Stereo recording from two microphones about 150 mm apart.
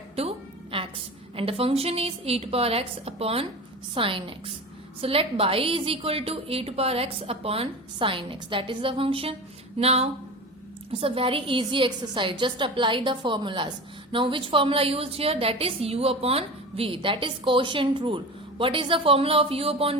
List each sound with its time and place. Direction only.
0.2 s music: 40° right (ahead or behind)
1.4 s a woman's voice: 40° right (ahead or behind)